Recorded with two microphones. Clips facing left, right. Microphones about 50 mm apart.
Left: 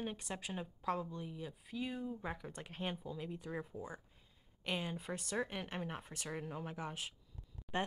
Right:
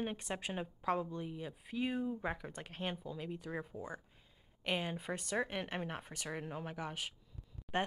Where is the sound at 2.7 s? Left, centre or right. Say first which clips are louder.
Right 1 dB; centre.